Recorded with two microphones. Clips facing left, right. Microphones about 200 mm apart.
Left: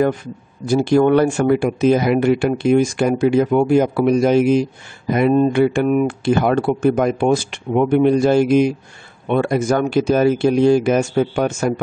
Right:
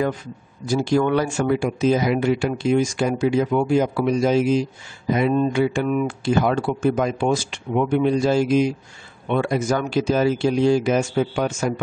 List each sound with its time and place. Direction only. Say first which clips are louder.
0.8 s speech: left 6 dB; 55° left (ahead or behind)